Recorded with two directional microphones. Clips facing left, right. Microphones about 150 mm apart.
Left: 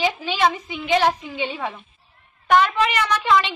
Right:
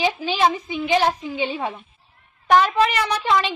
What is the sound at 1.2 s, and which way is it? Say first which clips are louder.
Speech: right 2 dB; 15° right (ahead or behind).